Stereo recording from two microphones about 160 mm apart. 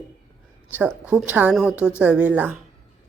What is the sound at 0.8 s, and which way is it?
A woman's voice, 5° right (ahead or behind).